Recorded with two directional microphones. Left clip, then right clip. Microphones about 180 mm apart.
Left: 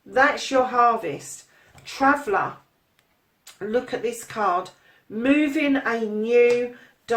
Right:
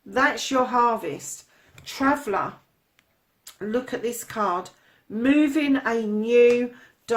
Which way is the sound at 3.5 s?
40° right (ahead or behind).